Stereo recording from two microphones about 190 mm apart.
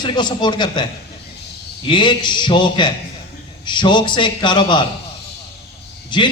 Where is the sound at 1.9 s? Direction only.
25° left (ahead or behind).